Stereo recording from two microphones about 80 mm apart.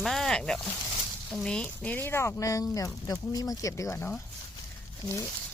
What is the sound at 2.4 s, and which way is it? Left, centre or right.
Speech, left.